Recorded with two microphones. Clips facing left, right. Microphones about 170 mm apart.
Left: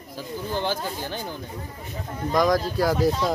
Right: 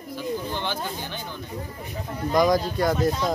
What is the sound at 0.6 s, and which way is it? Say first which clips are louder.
Speech: left 3 dB; 40° left (ahead or behind).